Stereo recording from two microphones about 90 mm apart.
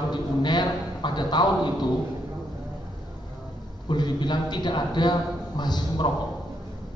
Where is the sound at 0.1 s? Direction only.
55° left (ahead or behind).